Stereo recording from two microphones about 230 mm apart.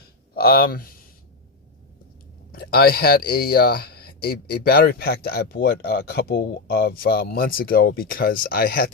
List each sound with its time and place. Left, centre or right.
0.3 s speech: left
2.5 s speech: left